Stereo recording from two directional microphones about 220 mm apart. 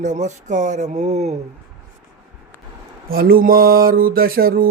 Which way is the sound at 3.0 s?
40° right (ahead or behind).